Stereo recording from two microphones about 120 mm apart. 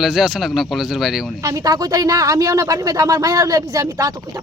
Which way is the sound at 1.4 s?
25° right (ahead or behind).